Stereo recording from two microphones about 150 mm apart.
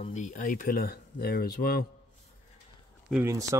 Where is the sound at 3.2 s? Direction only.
20° right (ahead or behind).